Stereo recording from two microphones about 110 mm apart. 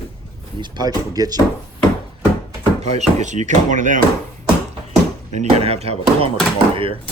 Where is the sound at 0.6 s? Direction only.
40° right (ahead or behind).